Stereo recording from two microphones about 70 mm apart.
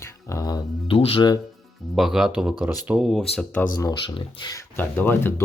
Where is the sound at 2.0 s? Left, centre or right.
Centre.